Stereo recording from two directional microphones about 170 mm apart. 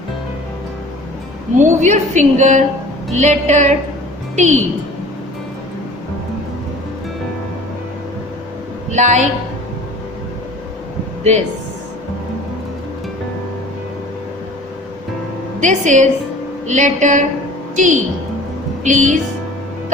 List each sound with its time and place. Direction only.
1.5 s a woman's voice: 45° right (ahead or behind)
8.9 s a woman's voice: 45° right (ahead or behind)
15.6 s a woman's voice: 45° right (ahead or behind)